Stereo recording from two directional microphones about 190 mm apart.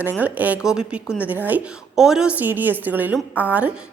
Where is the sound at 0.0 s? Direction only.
10° right (ahead or behind).